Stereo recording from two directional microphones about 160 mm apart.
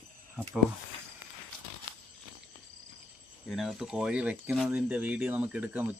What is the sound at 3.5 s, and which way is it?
Speech, centre (ahead or behind).